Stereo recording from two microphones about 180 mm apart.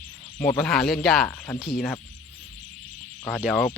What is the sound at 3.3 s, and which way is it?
Speech, 5° left (ahead or behind).